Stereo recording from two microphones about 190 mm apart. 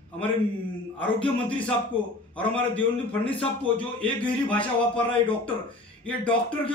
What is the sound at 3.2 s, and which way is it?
Speech, 30° left (ahead or behind).